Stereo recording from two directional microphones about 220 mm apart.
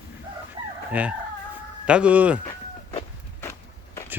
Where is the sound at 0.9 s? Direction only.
5° right (ahead or behind).